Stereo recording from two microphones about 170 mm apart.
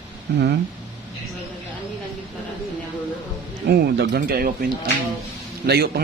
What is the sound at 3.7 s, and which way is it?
Music, 70° right (ahead or behind).